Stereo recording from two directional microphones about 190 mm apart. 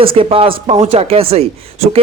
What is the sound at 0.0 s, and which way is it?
Speech, 30° right (ahead or behind).